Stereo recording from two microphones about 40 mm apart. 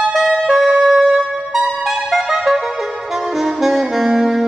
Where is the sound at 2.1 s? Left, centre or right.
Centre.